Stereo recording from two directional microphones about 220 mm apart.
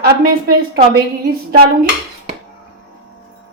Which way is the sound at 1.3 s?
45° right (ahead or behind).